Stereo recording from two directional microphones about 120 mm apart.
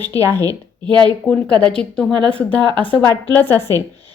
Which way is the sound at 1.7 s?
5° left (ahead or behind).